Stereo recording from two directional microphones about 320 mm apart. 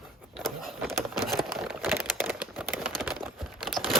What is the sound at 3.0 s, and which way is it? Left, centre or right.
Crumpling, centre.